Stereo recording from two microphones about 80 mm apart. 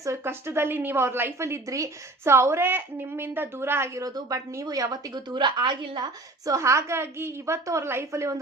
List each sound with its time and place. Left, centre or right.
0.0 s a woman's voice: right
4.0 s a woman's voice: right
6.4 s a woman's voice: right